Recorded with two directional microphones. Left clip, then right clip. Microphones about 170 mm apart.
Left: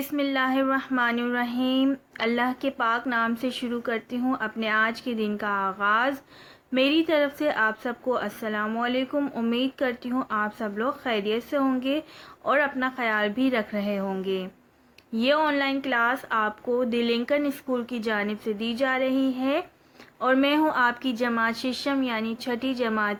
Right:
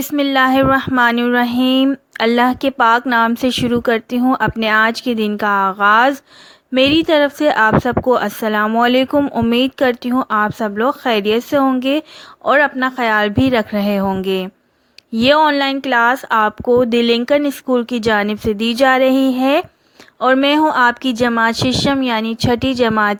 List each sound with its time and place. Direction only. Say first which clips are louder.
0.1 s speech: right 12 dB; 55° right (ahead or behind)